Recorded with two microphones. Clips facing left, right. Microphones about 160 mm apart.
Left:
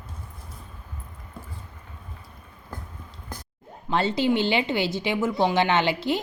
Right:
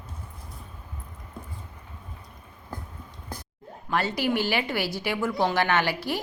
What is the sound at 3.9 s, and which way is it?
A woman's voice, 25° left (ahead or behind).